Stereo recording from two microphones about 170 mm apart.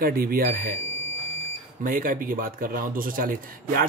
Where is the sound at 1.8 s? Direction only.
55° right (ahead or behind).